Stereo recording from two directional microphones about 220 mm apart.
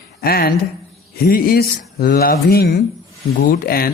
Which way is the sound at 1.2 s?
40° left (ahead or behind).